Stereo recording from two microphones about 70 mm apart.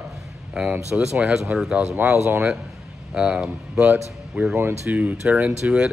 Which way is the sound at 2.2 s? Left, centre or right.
Right.